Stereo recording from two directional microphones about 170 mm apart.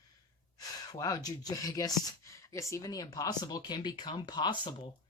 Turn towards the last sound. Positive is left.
turn(degrees=25)  # may be behind; listen again after turning